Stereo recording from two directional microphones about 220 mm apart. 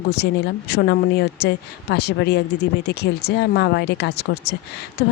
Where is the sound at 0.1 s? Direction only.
50° left (ahead or behind).